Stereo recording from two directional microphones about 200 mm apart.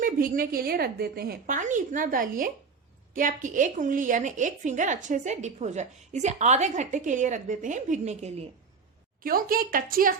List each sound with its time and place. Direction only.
0.0 s a woman's voice: 45° right (ahead or behind)
9.2 s a woman's voice: 45° right (ahead or behind)